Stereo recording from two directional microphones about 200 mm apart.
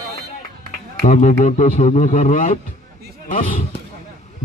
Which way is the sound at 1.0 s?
35° left (ahead or behind).